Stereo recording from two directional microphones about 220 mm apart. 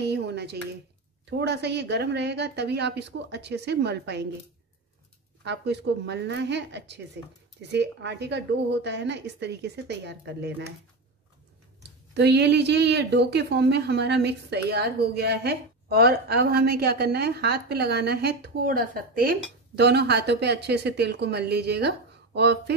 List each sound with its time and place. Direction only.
0.0 s speech: 50° right (ahead or behind)
5.4 s speech: 50° right (ahead or behind)
12.1 s speech: 50° right (ahead or behind)